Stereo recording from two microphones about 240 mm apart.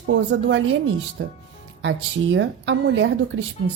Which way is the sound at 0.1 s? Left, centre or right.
Right.